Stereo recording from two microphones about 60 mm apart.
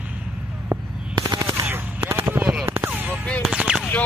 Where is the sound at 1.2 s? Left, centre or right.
Right.